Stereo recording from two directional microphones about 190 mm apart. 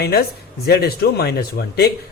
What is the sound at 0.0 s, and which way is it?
Speech, 60° left (ahead or behind).